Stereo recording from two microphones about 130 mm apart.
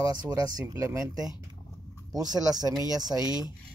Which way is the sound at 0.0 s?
30° right (ahead or behind).